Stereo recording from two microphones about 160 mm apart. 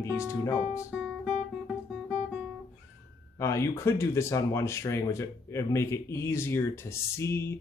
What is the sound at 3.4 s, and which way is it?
Music, 15° left (ahead or behind).